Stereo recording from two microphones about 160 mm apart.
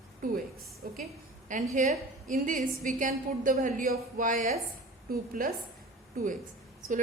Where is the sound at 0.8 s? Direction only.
65° right (ahead or behind).